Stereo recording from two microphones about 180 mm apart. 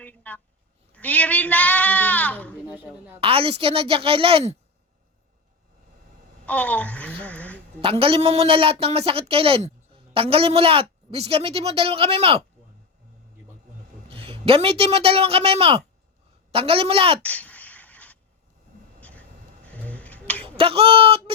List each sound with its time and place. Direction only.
0.0 s a sound: 10° left (ahead or behind)
0.9 s sheep: 10° left (ahead or behind)
3.2 s a woman's voice: 30° right (ahead or behind)
6.4 s a woman's voice: 10° left (ahead or behind)
7.8 s a woman's voice: 30° right (ahead or behind)
14.1 s a man's voice: 30° right (ahead or behind)
17.2 s a sound: 10° left (ahead or behind)
18.9 s vehicle: 10° left (ahead or behind)
19.6 s finger snapping: 5° left (ahead or behind)
20.4 s speech: 30° right (ahead or behind)